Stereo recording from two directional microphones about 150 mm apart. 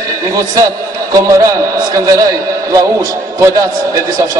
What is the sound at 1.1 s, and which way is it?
A man's voice, 20° right (ahead or behind).